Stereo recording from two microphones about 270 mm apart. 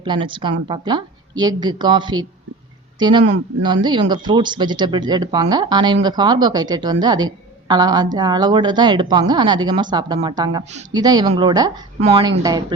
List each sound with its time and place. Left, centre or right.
0.0 s speech: centre